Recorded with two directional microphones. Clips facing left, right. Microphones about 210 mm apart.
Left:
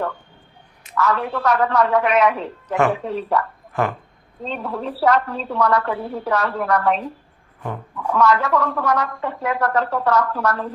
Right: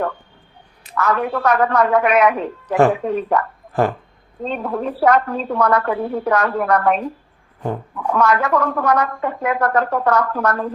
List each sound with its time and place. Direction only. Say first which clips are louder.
0.9 s a woman's voice: right 2 dB; 50° right (ahead or behind)
2.6 s speech: right 4 dB; 35° right (ahead or behind)
3.1 s speech: right 4 dB; 50° right (ahead or behind)
3.7 s a sound: right 5 dB; 35° right (ahead or behind)
4.4 s speech: right 4 dB; 50° right (ahead or behind)
8.1 s speech: right 1 dB; 50° right (ahead or behind)